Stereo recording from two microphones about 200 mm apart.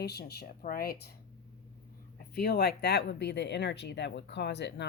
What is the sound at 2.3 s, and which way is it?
A woman's voice, 55° left (ahead or behind).